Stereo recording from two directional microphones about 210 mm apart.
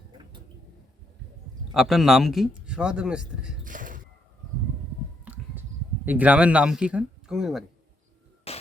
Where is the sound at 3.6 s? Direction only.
40° right (ahead or behind).